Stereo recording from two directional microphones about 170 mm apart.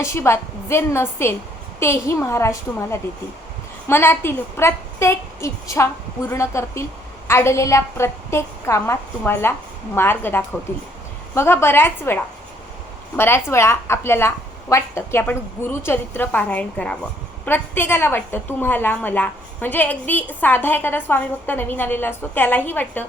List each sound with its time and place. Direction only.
0.0 s a woman's voice: 15° left (ahead or behind)